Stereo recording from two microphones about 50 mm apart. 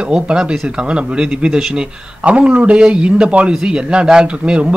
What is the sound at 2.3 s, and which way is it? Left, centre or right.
Speech, right.